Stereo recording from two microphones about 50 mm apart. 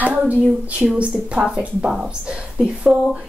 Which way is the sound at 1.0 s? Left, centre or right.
Right.